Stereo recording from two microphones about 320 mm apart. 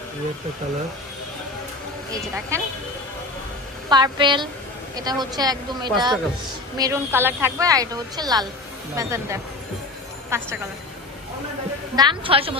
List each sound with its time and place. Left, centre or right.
2.1 s a woman's voice: centre
3.9 s a woman's voice: centre
11.9 s a woman's voice: centre